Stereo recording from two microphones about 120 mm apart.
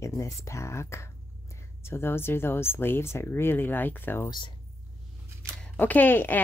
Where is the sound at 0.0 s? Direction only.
25° left (ahead or behind).